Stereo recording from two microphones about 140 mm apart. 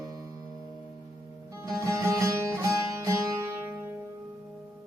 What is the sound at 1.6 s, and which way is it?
Music, 20° right (ahead or behind).